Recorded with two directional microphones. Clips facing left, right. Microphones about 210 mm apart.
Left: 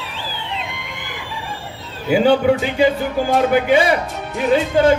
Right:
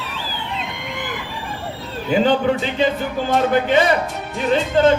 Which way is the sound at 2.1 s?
10° left (ahead or behind).